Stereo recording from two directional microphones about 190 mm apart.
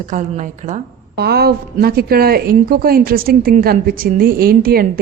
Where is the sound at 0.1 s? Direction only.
40° right (ahead or behind).